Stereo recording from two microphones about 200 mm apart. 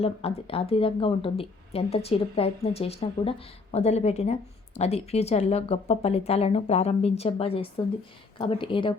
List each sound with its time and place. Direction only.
0.0 s a woman's voice: 30° left (ahead or behind)